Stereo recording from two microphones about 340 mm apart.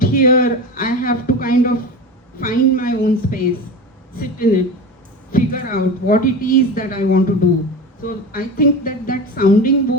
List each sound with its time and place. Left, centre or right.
0.0 s a man's voice: left